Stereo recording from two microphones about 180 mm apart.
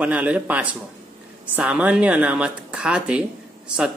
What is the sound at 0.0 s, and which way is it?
Speech, 5° right (ahead or behind).